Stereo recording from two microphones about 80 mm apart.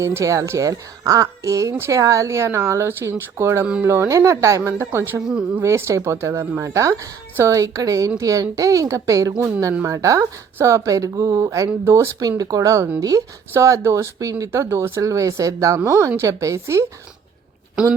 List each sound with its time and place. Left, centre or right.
0.0 s speech: right
12.4 s speech: right